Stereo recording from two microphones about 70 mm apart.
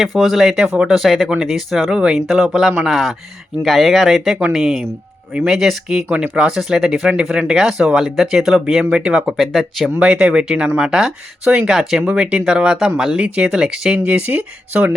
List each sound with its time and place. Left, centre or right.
0.0 s speech: centre
9.4 s speech: centre
10.0 s speech: centre
14.1 s speech: right